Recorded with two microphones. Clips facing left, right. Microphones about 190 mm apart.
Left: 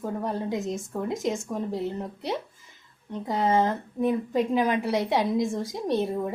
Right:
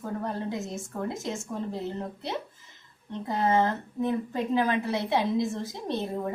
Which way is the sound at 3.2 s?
15° left (ahead or behind).